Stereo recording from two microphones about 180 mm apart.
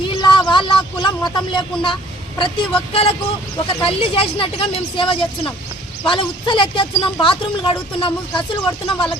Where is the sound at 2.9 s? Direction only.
35° left (ahead or behind).